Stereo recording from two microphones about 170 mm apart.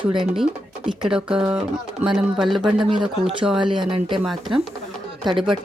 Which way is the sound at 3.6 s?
30° right (ahead or behind).